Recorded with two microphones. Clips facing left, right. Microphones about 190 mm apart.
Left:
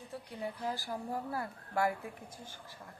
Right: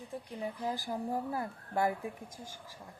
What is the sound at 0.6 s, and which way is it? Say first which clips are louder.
Speech: right 4 dB; 15° right (ahead or behind).